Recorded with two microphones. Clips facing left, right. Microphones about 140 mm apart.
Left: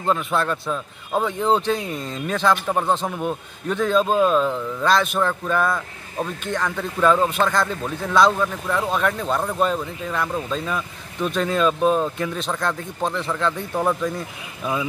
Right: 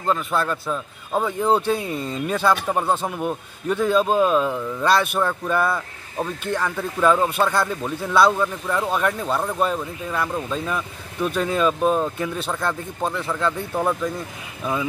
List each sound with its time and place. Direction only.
0.0 s a man's voice: centre (ahead or behind)